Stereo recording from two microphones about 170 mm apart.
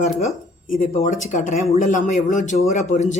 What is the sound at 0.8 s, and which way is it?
A man's voice, 50° left (ahead or behind).